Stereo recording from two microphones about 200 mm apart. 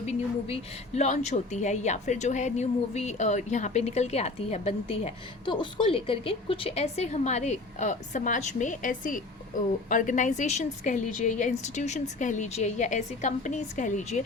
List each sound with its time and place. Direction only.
0.0 s a woman's voice: 30° left (ahead or behind)